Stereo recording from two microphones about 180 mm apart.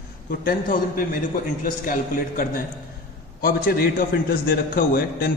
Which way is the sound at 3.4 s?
55° left (ahead or behind).